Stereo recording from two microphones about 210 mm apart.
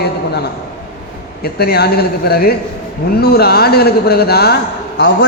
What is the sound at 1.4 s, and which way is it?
A man's voice, 50° left (ahead or behind).